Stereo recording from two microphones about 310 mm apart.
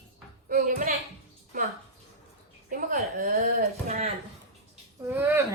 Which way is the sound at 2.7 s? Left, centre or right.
Right.